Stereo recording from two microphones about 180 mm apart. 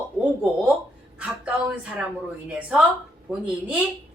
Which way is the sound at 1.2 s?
5° right (ahead or behind).